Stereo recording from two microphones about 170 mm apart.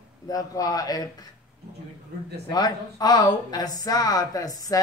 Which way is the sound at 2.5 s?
25° left (ahead or behind).